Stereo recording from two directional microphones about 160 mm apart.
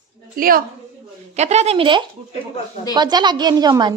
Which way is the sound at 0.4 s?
65° right (ahead or behind).